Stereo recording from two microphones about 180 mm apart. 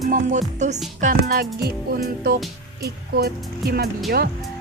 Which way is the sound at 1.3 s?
60° right (ahead or behind).